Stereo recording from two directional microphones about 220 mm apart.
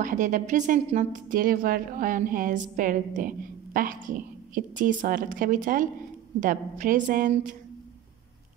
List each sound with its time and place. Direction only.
0.0 s a woman's voice: 35° right (ahead or behind)